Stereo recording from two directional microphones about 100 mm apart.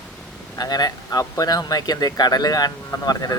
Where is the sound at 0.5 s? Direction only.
40° left (ahead or behind).